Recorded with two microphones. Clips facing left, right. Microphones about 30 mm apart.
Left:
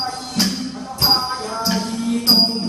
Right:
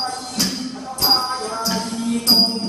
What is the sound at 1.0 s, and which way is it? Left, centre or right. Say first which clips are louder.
Music: left 1 dB; centre.